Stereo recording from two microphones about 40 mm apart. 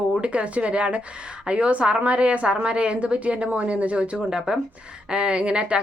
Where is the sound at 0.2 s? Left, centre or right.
Right.